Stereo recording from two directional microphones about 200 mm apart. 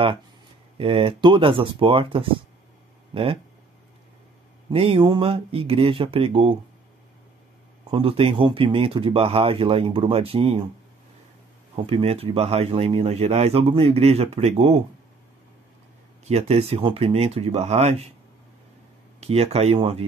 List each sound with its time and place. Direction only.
0.7 s speech: 25° right (ahead or behind)
4.7 s speech: 25° right (ahead or behind)
7.9 s speech: 25° right (ahead or behind)
11.7 s speech: 30° right (ahead or behind)
16.3 s speech: 30° right (ahead or behind)
19.1 s speech: 30° right (ahead or behind)